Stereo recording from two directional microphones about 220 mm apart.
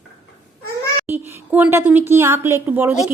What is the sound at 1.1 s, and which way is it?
A woman's voice, 10° right (ahead or behind).